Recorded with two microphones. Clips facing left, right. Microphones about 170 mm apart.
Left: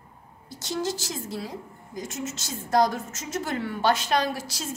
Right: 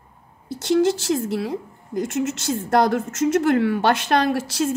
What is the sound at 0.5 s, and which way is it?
A woman's voice, 65° right (ahead or behind).